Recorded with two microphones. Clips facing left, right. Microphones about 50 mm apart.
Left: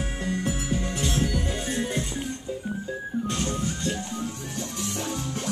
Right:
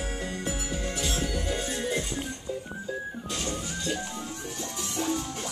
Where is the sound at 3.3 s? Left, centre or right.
Left.